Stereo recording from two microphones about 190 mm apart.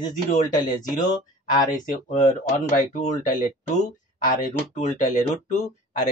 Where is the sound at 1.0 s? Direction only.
20° left (ahead or behind).